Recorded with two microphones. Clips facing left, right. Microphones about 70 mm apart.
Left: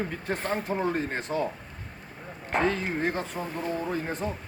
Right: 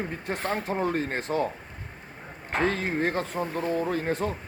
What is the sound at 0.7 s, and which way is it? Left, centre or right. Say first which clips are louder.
Speech: right 1 dB; right.